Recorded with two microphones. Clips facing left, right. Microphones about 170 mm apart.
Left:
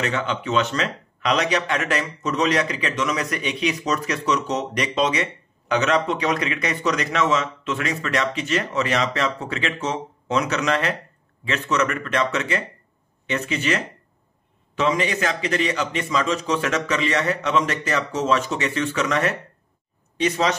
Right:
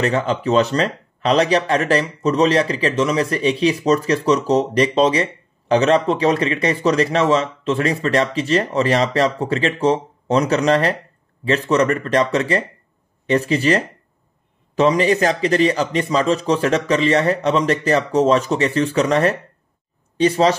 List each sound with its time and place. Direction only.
0.0 s speech: 35° right (ahead or behind)